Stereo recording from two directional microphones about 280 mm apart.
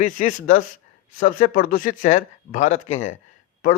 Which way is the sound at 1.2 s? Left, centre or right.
Left.